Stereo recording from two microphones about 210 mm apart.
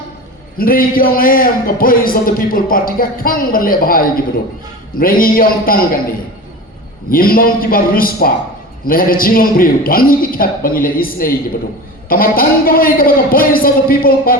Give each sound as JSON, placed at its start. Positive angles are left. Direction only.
{"t": 0.6, "sound": "a man's voice", "side_deg": 45}
{"t": 7.1, "sound": "a man's voice", "side_deg": 45}